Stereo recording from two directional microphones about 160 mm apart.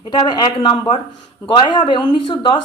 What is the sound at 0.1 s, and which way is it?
A woman's voice, 25° left (ahead or behind).